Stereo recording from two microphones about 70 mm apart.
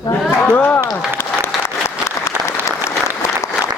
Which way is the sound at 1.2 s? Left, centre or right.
Left.